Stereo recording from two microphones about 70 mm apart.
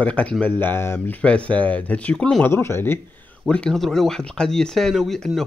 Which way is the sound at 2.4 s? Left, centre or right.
Left.